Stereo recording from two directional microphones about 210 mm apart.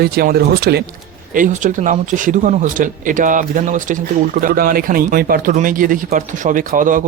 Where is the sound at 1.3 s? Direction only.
40° right (ahead or behind).